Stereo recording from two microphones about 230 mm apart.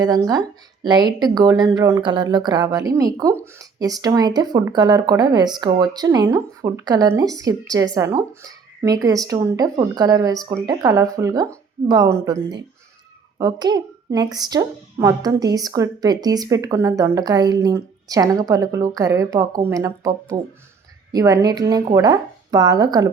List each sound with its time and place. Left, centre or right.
0.0 s speech: centre